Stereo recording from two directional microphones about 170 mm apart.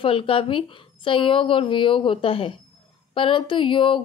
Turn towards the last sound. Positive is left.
turn(degrees=30)  # may be behind; listen again after turning